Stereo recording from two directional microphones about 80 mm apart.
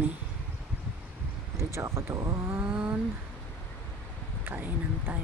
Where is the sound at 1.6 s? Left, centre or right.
Right.